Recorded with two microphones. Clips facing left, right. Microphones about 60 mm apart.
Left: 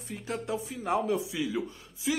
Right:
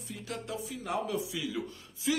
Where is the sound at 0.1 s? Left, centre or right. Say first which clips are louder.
Left 5 dB; left.